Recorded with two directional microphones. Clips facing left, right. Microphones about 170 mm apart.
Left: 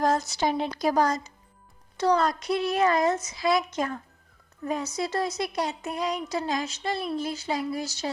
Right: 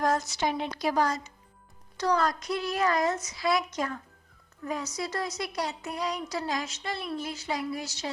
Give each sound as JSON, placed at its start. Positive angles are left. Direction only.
{"t": 0.0, "sound": "speech", "side_deg": 30}
{"t": 2.0, "sound": "a woman's voice", "side_deg": 25}